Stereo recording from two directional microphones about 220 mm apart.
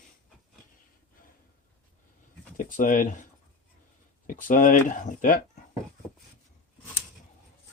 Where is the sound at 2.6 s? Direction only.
40° left (ahead or behind).